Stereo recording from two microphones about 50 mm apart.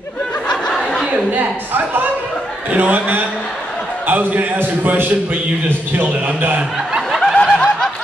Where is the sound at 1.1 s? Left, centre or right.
Right.